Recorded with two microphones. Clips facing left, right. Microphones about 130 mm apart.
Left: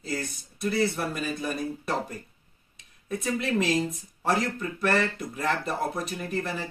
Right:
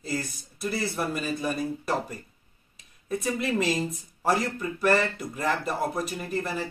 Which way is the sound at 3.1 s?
Centre (ahead or behind).